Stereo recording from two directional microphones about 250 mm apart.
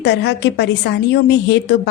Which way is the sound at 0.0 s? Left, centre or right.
Left.